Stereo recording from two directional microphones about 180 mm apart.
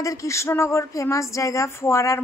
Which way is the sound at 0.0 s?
20° left (ahead or behind).